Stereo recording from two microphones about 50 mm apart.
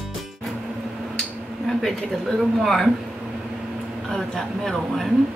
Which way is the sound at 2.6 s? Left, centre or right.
Centre.